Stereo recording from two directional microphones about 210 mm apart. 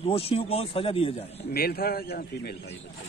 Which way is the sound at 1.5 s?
45° left (ahead or behind).